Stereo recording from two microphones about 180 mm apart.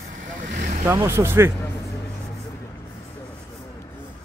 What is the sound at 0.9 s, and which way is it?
Speech, 15° right (ahead or behind).